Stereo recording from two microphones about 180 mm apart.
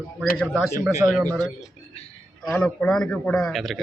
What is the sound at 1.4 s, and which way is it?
A man's voice, 5° left (ahead or behind).